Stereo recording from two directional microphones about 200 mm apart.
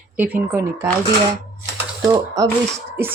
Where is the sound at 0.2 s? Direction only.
10° right (ahead or behind).